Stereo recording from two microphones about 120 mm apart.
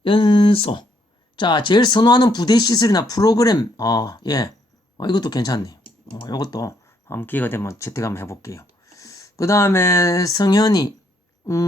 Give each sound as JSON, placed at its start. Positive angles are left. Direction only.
{"t": 0.0, "sound": "speech", "side_deg": 45}